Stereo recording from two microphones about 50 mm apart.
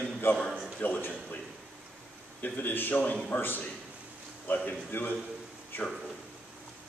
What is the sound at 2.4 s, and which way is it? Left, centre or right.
A man's voice, left.